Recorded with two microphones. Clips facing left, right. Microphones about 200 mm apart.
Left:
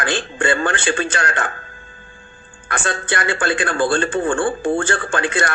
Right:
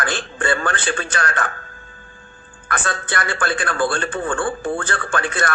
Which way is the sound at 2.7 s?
25° left (ahead or behind).